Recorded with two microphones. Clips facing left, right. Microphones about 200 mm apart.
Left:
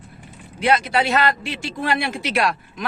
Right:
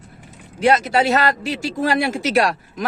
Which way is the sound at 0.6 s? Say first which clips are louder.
Right 3 dB; 40° right (ahead or behind).